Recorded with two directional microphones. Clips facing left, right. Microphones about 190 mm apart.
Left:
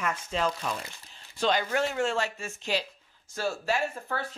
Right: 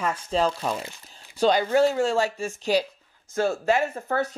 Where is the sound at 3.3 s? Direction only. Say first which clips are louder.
Right 7 dB; 50° right (ahead or behind).